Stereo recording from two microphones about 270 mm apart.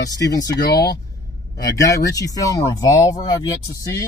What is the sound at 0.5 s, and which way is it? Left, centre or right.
Speech, left.